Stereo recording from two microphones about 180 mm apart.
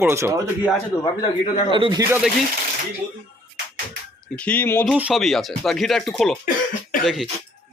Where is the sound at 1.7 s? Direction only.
25° right (ahead or behind).